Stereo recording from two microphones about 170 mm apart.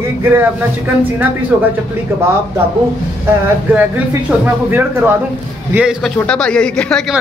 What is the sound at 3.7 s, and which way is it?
Speech, 10° right (ahead or behind).